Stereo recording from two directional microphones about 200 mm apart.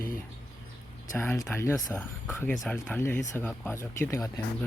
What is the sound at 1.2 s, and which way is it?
Speech, 15° left (ahead or behind).